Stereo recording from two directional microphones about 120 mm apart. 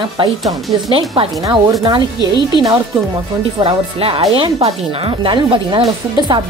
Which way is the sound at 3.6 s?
50° right (ahead or behind).